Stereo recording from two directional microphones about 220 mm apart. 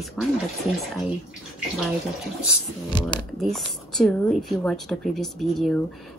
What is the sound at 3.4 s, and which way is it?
A woman's voice, centre (ahead or behind).